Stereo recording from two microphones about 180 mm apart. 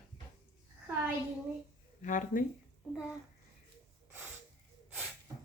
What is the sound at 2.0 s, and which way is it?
Speech, 45° left (ahead or behind).